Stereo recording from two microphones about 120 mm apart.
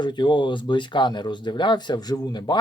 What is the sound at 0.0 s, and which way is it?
Speech, 40° left (ahead or behind).